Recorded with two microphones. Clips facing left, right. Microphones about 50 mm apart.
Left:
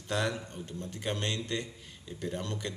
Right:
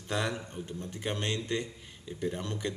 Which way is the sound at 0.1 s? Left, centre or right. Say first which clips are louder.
Even; centre.